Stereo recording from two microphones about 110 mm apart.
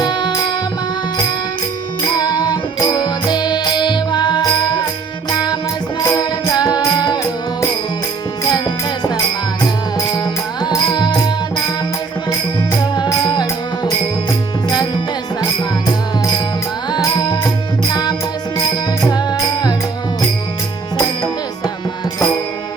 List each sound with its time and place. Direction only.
0.0 s music: 45° left (ahead or behind)
2.1 s music: 40° left (ahead or behind)
8.4 s music: 40° left (ahead or behind)
10.8 s music: 40° left (ahead or behind)
13.1 s music: 40° left (ahead or behind)
16.9 s music: 40° left (ahead or behind)